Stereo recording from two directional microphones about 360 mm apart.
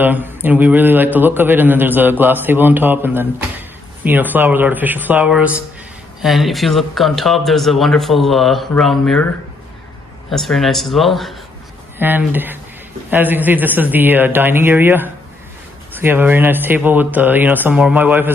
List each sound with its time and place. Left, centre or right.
0.0 s a man's voice: centre
10.3 s a man's voice: centre